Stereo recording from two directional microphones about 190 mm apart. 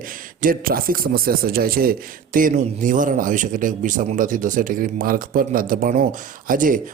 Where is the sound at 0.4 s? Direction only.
50° right (ahead or behind).